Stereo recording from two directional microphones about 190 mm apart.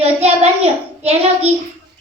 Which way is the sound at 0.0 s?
30° right (ahead or behind).